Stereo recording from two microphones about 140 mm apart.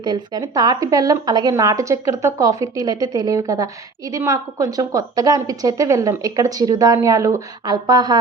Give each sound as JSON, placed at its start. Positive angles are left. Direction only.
{"t": 0.0, "sound": "a woman's voice", "side_deg": -30}